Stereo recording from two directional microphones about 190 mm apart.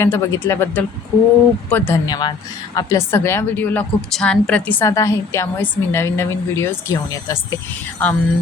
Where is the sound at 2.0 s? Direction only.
20° left (ahead or behind).